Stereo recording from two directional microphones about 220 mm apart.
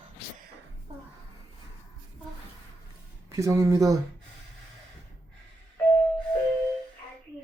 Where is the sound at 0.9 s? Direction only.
25° right (ahead or behind).